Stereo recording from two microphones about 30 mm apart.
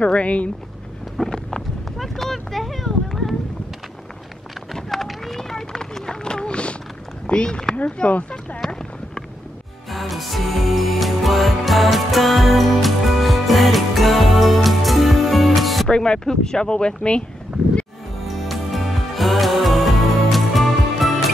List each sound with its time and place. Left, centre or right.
0.0 s speech: left
1.2 s vehicle: centre
2.0 s speech: centre
4.8 s run: centre; by 6.8 s left
7.3 s speech: left
7.7 s a sound: centre
8.2 s speech: left
9.8 s music: centre
15.9 s speech: left
18.2 s music: centre